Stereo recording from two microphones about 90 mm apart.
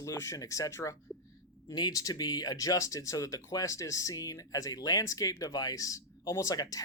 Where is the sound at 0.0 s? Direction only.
35° left (ahead or behind).